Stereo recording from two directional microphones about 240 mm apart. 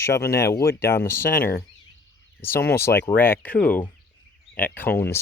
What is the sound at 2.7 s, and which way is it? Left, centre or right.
Speech, centre.